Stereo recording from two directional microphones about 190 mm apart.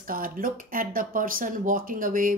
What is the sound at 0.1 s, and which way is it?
Speech, 45° right (ahead or behind).